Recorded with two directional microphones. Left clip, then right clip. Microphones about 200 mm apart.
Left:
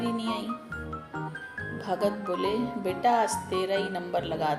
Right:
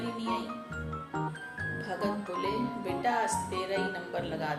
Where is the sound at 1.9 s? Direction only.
40° left (ahead or behind).